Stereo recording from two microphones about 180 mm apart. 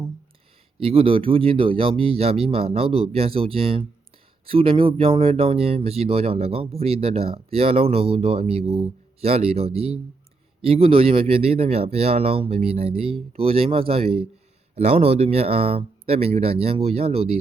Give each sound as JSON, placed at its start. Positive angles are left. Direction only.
{"t": 0.8, "sound": "speech", "side_deg": -30}